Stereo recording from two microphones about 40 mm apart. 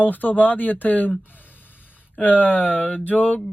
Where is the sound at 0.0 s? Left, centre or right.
Left.